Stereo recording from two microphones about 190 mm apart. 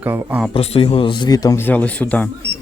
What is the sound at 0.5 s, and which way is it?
Speech, 35° left (ahead or behind).